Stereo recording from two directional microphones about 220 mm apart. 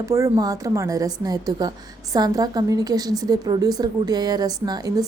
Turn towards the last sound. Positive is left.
turn(degrees=-15)  # may be behind; listen again after turning